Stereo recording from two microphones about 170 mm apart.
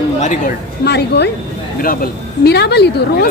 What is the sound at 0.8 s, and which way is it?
Speech, 80° left.